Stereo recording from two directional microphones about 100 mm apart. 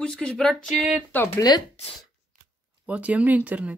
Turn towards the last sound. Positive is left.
turn(degrees=-15)  # may be behind; listen again after turning